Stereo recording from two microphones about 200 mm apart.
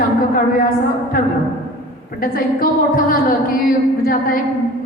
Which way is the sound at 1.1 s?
45° left (ahead or behind).